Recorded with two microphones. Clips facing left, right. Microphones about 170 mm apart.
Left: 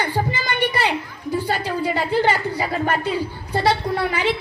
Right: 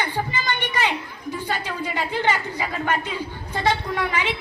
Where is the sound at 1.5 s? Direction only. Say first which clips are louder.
Left 4 dB; 35° left (ahead or behind).